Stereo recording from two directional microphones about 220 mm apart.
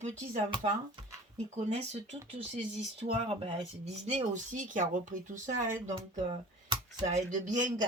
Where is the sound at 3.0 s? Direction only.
25° right (ahead or behind).